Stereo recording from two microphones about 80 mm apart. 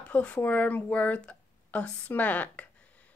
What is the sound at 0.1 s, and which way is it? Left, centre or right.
Speech, centre.